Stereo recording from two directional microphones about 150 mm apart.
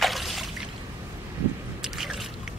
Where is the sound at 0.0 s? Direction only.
Centre (ahead or behind).